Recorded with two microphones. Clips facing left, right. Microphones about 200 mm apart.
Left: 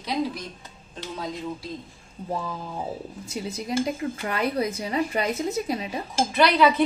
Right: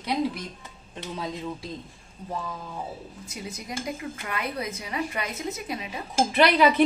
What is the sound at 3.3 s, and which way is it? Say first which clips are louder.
Speech: left 8 dB; 30° left (ahead or behind).